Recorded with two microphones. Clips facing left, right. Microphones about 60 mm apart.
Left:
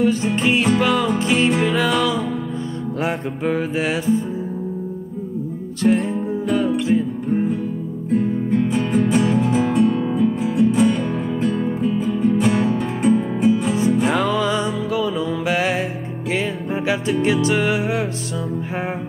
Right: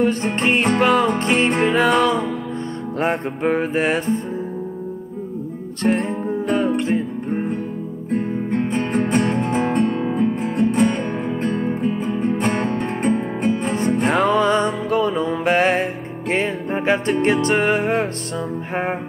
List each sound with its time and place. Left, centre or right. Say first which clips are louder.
0.0 s music: left 1 dB; right
5.8 s music: left 2 dB; right
8.5 s music: left 2 dB; right
11.6 s music: left 1 dB; right